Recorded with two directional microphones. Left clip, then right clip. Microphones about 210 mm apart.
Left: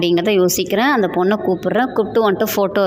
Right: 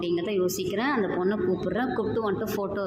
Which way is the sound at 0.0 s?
40° left (ahead or behind).